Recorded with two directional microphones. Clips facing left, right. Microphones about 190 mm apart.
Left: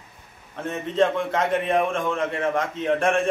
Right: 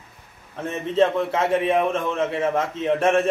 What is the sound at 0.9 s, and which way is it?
A man's voice, 5° right (ahead or behind).